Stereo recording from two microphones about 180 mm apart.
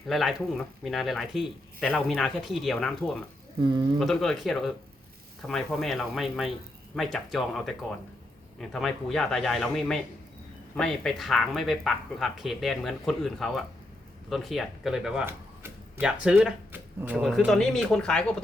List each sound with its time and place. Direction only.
0.1 s speech: centre (ahead or behind)
3.6 s speech: 25° right (ahead or behind)
4.0 s speech: centre (ahead or behind)